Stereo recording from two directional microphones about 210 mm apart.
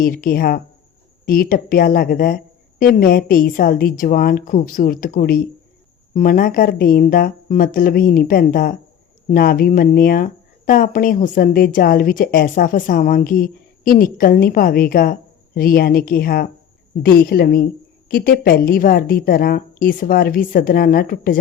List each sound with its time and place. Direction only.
0.0 s a woman's voice: 40° left (ahead or behind)